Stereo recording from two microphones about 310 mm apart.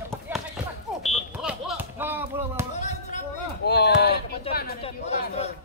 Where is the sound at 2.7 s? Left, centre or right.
Left.